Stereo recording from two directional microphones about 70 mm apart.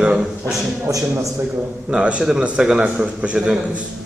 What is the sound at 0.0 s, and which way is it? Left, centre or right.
Speech, centre.